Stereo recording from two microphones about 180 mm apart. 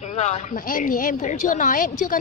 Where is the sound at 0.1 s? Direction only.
40° left (ahead or behind).